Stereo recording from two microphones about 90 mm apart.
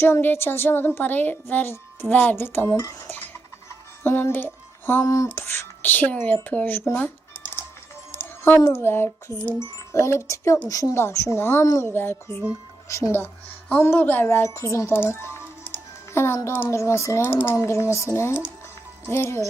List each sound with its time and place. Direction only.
0.0 s speech: 25° left (ahead or behind)
4.0 s speech: 25° left (ahead or behind)
5.0 s a child's voice: 40° left (ahead or behind); by 6.8 s 20° left (ahead or behind)
8.1 s a child's voice: 25° left (ahead or behind)
11.6 s a child's voice: 40° left (ahead or behind)
11.9 s a child's voice: 25° left (ahead or behind)